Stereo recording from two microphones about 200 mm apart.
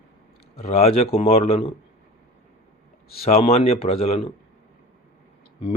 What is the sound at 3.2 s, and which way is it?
A man's voice, 30° left (ahead or behind).